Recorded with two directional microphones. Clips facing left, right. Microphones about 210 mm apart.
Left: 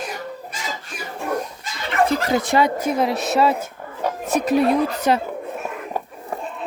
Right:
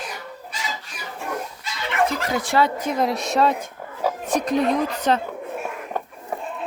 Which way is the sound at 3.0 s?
5° left (ahead or behind).